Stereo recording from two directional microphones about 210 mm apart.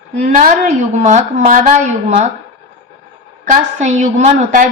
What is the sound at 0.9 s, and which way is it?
A woman's voice, 35° right (ahead or behind).